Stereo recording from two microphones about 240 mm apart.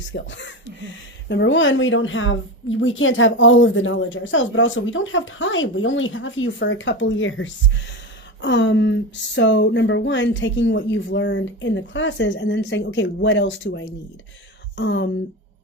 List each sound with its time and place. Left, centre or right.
0.1 s a woman's voice: left